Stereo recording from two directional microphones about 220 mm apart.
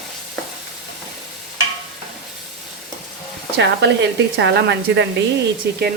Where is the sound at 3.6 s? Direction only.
55° right (ahead or behind).